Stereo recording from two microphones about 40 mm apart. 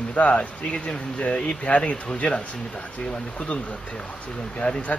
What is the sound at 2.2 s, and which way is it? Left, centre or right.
Speech, left.